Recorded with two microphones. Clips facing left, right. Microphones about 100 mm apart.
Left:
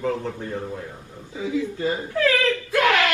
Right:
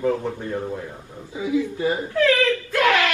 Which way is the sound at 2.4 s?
20° left (ahead or behind).